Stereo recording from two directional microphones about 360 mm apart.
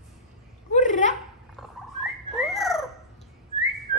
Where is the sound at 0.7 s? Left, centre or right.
Centre.